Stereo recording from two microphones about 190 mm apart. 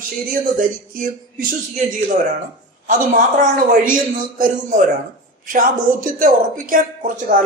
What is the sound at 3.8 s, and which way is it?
A man's voice, 45° right (ahead or behind).